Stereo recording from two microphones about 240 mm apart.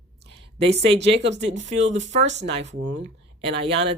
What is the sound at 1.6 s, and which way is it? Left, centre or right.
Speech, right.